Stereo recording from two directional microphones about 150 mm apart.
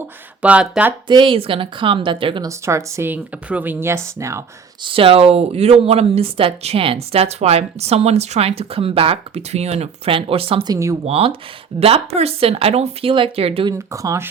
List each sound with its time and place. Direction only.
0.4 s speech: 5° right (ahead or behind)
1.0 s speech: 35° right (ahead or behind)
2.5 s speech: 20° right (ahead or behind)
4.8 s speech: 35° right (ahead or behind)
10.7 s speech: 20° right (ahead or behind)
11.0 s speech: 40° right (ahead or behind)
13.7 s speech: 20° right (ahead or behind)